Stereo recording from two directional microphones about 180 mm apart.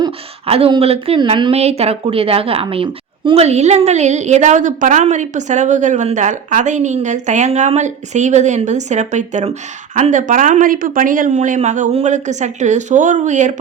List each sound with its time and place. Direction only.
0.0 s speech: 35° right (ahead or behind)